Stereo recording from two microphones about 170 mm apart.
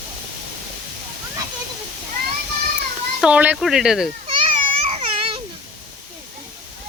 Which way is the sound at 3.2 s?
5° right (ahead or behind).